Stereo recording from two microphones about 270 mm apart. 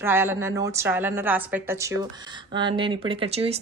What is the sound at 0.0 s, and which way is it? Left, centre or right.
A woman's voice, centre.